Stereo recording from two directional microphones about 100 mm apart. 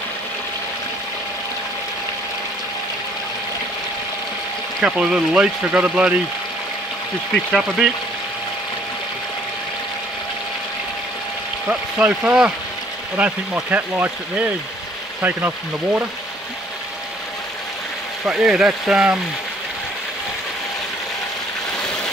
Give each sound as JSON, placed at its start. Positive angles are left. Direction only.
{"t": 4.8, "sound": "speech", "side_deg": -10}
{"t": 7.5, "sound": "speech", "side_deg": 0}
{"t": 12.0, "sound": "speech", "side_deg": -10}
{"t": 18.2, "sound": "speech", "side_deg": -5}